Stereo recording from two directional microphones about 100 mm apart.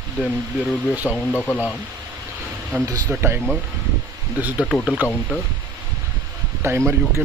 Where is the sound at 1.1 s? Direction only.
20° left (ahead or behind).